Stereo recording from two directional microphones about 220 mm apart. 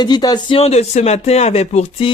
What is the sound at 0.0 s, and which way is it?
A man's voice, 20° left (ahead or behind).